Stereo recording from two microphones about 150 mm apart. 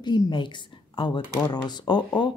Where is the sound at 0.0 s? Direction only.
30° left (ahead or behind).